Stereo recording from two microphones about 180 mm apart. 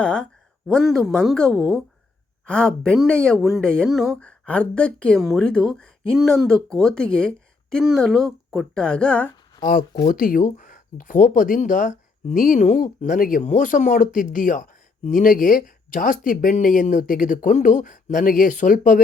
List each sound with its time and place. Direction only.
0.0 s a woman's voice: 5° left (ahead or behind)
10.1 s speech: 50° left (ahead or behind)